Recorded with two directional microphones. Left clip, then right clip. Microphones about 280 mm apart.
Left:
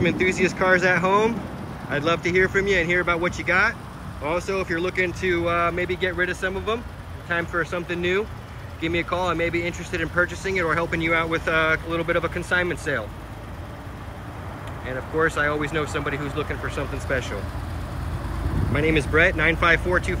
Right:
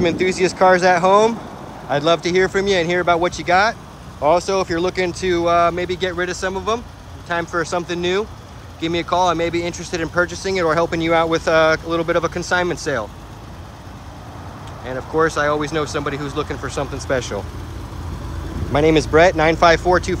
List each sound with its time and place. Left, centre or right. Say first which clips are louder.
0.0 s speech: right 4 dB; centre
14.9 s speech: right 5 dB; centre
18.7 s speech: right 7 dB; centre